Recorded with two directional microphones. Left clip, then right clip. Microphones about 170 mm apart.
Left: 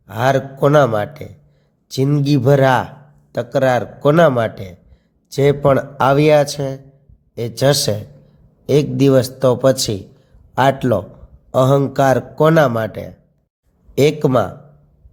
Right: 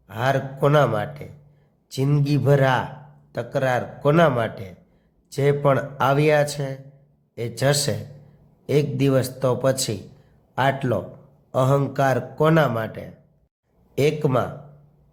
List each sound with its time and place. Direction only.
0.0 s a man's voice: 25° left (ahead or behind)